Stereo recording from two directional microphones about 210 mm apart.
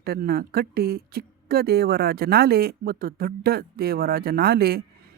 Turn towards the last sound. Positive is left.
turn(degrees=-45)  # may be behind; listen again after turning